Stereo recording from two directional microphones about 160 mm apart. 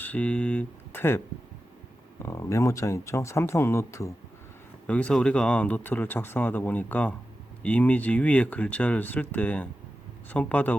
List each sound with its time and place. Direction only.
0.0 s speech: 10° left (ahead or behind)
2.2 s speech: 20° left (ahead or behind)